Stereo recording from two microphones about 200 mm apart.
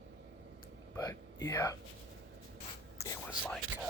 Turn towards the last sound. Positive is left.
turn(degrees=10)  # may be behind; listen again after turning